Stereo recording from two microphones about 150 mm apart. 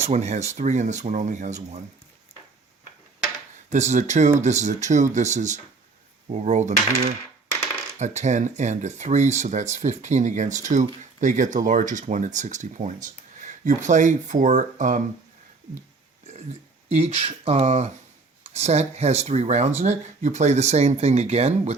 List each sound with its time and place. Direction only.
0.1 s speech: 50° right (ahead or behind)
3.7 s speech: 50° right (ahead or behind)
16.9 s speech: 45° right (ahead or behind)